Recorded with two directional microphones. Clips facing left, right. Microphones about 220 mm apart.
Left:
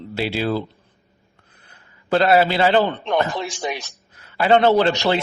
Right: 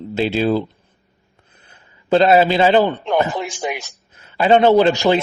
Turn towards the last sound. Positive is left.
turn(degrees=-15)  # may be behind; listen again after turning